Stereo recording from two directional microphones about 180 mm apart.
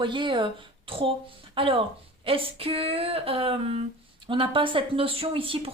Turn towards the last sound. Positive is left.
turn(degrees=-30)  # may be behind; listen again after turning